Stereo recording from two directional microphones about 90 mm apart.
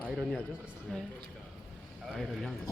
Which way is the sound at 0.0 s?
10° left (ahead or behind).